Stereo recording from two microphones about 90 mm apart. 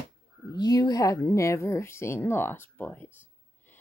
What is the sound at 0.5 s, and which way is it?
Speech, 45° left (ahead or behind).